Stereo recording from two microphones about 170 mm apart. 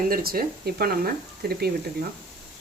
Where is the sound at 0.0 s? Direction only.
60° right (ahead or behind).